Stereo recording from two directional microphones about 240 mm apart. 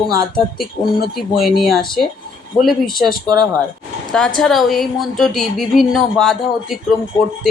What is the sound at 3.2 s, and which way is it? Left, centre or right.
Speech, centre.